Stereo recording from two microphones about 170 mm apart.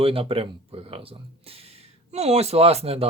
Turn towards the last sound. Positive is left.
turn(degrees=-35)  # may be behind; listen again after turning